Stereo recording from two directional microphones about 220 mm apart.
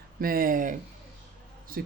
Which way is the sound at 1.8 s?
40° right (ahead or behind).